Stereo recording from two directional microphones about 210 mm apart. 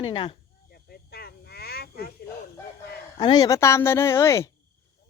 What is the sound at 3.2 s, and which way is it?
A woman's voice, 20° left (ahead or behind).